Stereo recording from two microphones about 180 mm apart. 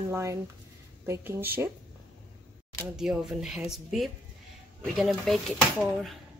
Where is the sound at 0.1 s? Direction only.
15° right (ahead or behind).